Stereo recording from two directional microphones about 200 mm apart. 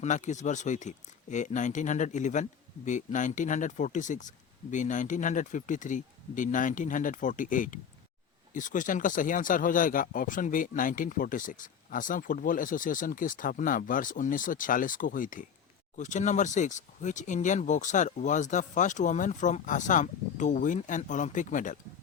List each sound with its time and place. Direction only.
0.0 s speech: 35° left (ahead or behind)